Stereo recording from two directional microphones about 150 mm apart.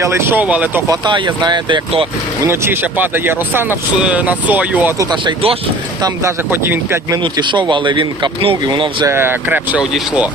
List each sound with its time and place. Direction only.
0.0 s speech: 15° right (ahead or behind)
0.9 s speech: 30° right (ahead or behind)
2.4 s speech: 15° right (ahead or behind)
6.0 s speech: 15° right (ahead or behind)
7.2 s speech: 30° right (ahead or behind)
9.0 s speech: 15° right (ahead or behind)